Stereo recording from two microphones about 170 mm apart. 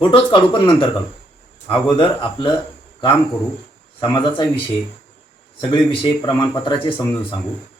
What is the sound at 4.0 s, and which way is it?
Speech, 30° left (ahead or behind).